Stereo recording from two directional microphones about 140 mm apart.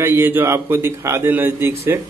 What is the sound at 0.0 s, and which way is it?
A man's voice, 20° right (ahead or behind).